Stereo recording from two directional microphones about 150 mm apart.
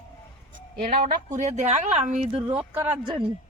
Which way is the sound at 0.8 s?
60° right (ahead or behind).